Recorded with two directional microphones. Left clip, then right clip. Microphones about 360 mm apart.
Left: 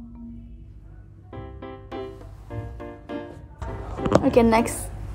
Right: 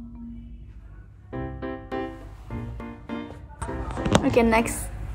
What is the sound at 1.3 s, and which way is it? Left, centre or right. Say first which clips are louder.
Music: right 5 dB; centre.